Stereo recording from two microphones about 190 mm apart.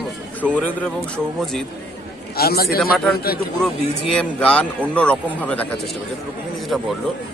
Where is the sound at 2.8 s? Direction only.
Centre (ahead or behind).